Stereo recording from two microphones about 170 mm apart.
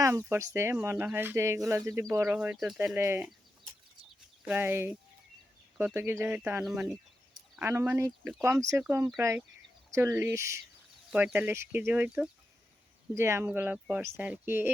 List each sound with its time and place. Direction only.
0.0 s speech: 15° right (ahead or behind)
4.4 s speech: 10° right (ahead or behind)